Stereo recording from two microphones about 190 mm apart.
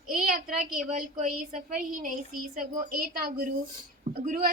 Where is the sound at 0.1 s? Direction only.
50° right (ahead or behind).